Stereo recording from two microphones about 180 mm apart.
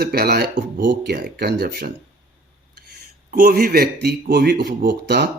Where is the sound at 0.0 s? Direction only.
60° right (ahead or behind).